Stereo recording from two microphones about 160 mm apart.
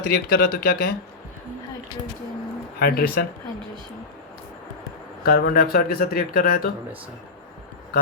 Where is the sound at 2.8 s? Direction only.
70° left (ahead or behind).